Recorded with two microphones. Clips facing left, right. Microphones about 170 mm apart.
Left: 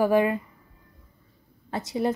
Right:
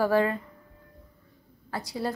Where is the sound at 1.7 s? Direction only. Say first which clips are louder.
Left 5 dB; 20° left (ahead or behind).